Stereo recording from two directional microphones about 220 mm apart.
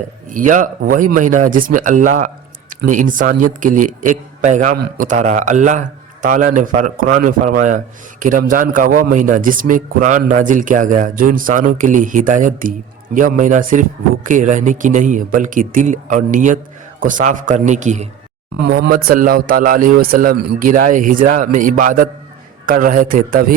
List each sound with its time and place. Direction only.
0.3 s a man's voice: 35° right (ahead or behind)
18.6 s a man's voice: 45° right (ahead or behind)